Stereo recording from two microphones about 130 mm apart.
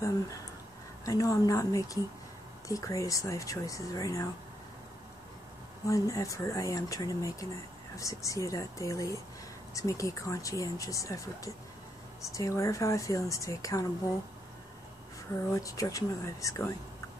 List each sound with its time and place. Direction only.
1.0 s speech: 25° left (ahead or behind)
5.9 s speech: 25° left (ahead or behind)
15.5 s speech: 25° left (ahead or behind)